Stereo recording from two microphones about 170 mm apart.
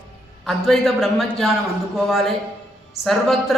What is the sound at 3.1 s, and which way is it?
Speech, centre (ahead or behind).